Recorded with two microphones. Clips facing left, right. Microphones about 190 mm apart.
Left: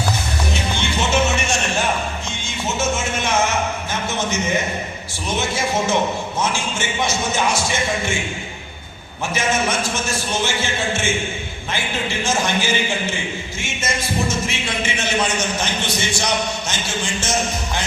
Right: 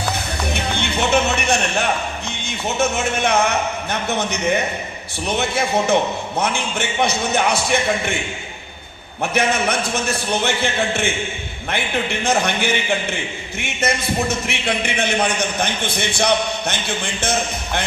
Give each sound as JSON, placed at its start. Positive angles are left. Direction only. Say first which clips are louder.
{"t": 0.4, "sound": "music", "louder": "right 2 dB", "side_deg": -60}
{"t": 2.6, "sound": "a man's voice", "louder": "right 2 dB", "side_deg": -60}
{"t": 9.3, "sound": "a man's voice", "louder": "right 1 dB", "side_deg": -60}
{"t": 12.2, "sound": "a man's voice", "louder": "right 1 dB", "side_deg": -60}